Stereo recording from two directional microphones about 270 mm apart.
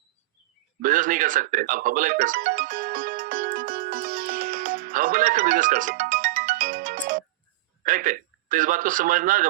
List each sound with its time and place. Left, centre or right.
0.8 s music: right
7.9 s a man's voice: right